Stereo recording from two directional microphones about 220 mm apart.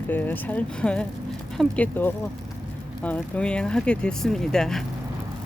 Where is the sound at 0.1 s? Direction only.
10° left (ahead or behind).